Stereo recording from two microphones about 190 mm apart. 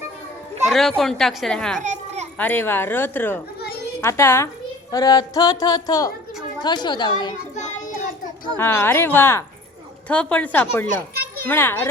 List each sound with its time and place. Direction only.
0.7 s a woman's voice: centre (ahead or behind)
1.8 s children playing: 40° right (ahead or behind)
2.4 s speech: 10° left (ahead or behind)
8.5 s speech: 10° left (ahead or behind)